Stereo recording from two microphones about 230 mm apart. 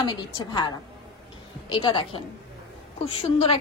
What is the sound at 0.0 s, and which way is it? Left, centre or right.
Speech, centre.